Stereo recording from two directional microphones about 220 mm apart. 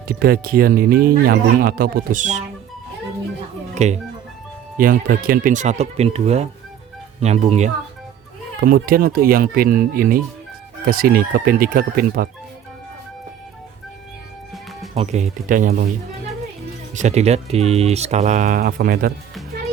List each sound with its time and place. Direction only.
0.1 s speech: 45° right (ahead or behind)
3.8 s speech: 30° right (ahead or behind)
8.6 s speech: 40° right (ahead or behind)
14.9 s speech: 30° right (ahead or behind)
16.9 s speech: 30° right (ahead or behind)